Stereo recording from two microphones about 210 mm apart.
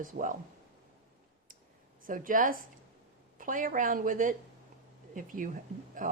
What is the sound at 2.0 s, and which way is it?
Speech, 40° right (ahead or behind).